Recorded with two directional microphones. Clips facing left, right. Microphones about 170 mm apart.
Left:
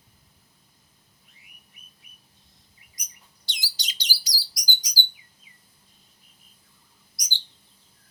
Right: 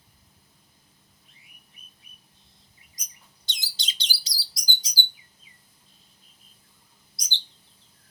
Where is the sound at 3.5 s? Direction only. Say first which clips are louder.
Even; 25° right (ahead or behind).